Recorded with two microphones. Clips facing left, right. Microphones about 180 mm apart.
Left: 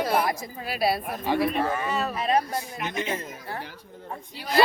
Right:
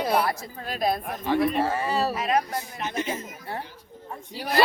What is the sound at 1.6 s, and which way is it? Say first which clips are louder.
Speech: right 2 dB; 30° right (ahead or behind).